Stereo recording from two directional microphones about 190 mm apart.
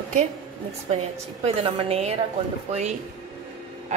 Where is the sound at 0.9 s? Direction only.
30° right (ahead or behind).